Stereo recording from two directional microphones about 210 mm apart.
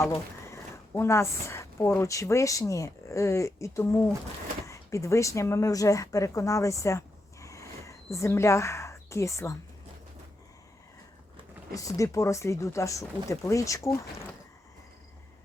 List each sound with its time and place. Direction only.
0.4 s speech: 15° left (ahead or behind)
11.7 s speech: 15° left (ahead or behind)